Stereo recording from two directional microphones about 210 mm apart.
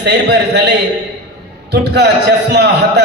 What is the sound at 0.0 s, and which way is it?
A man's voice, 55° right (ahead or behind).